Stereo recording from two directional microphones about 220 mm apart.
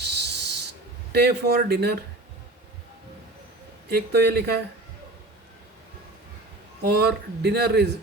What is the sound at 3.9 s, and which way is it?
Speech, 45° right (ahead or behind).